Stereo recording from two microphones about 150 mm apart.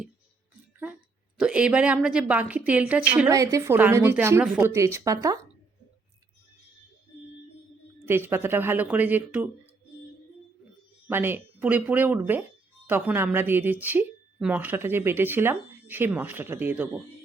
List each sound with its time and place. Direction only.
1.4 s speech: 5° right (ahead or behind)
3.2 s a woman's voice: 20° right (ahead or behind)
8.0 s speech: 15° right (ahead or behind)
11.1 s speech: 15° right (ahead or behind)